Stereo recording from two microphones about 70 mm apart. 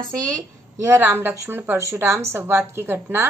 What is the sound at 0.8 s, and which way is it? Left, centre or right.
A woman's voice, right.